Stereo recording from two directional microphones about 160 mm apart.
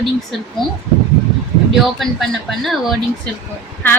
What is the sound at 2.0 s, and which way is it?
Speech, centre (ahead or behind).